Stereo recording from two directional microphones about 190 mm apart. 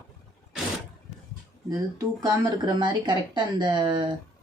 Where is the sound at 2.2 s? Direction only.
20° right (ahead or behind).